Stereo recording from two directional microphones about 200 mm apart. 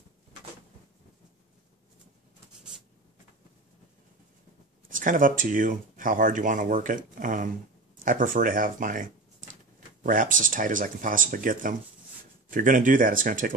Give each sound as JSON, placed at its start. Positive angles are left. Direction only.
{"t": 4.8, "sound": "speech", "side_deg": -40}